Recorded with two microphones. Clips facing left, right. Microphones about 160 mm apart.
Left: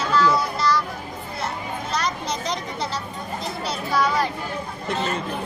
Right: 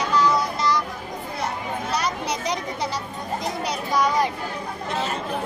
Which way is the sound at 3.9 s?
15° right (ahead or behind).